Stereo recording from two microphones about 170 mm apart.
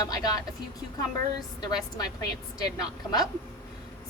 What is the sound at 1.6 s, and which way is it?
Speech, 25° left (ahead or behind).